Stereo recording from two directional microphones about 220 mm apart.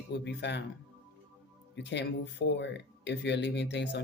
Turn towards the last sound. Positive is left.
turn(degrees=50)  # may be behind; listen again after turning